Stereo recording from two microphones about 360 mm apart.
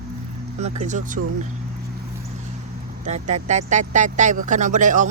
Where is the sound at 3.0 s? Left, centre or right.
Centre.